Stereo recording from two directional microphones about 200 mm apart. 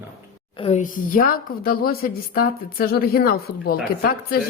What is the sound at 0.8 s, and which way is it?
A woman's voice, 45° left (ahead or behind).